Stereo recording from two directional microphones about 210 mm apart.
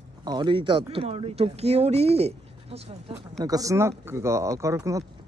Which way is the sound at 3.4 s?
15° right (ahead or behind).